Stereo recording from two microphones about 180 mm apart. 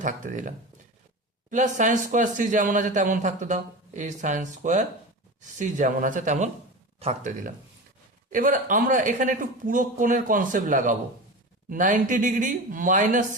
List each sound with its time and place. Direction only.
0.0 s speech: 45° right (ahead or behind)